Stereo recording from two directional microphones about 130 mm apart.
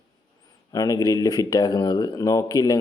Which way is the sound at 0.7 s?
25° left (ahead or behind).